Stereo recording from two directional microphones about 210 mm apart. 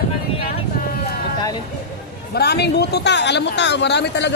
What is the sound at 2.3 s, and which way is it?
Speech, 50° left (ahead or behind).